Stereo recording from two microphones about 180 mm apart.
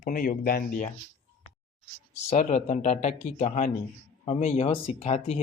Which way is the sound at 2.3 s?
40° left (ahead or behind).